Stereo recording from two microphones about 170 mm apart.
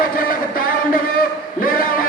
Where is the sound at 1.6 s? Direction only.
55° left (ahead or behind).